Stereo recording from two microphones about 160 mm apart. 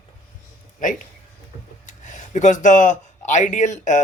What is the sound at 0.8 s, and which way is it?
Speech, 55° left (ahead or behind).